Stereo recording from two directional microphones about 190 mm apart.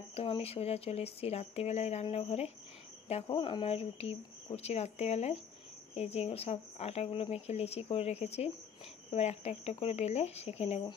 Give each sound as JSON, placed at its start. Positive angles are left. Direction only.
{"t": 0.1, "sound": "speech", "side_deg": 30}